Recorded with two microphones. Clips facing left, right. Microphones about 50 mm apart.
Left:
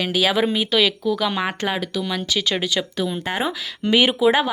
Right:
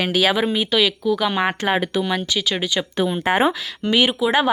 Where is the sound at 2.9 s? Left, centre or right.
Right.